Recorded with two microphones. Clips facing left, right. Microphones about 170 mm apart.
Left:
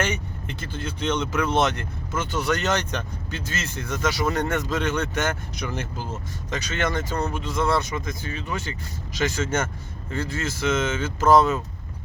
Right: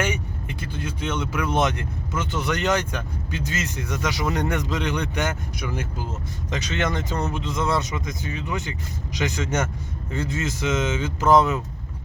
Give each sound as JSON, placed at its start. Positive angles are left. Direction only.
{"t": 0.0, "sound": "speech", "side_deg": -10}
{"t": 6.5, "sound": "speech", "side_deg": -20}